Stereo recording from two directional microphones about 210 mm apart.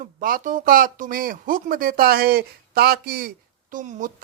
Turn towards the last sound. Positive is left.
turn(degrees=-35)  # may be behind; listen again after turning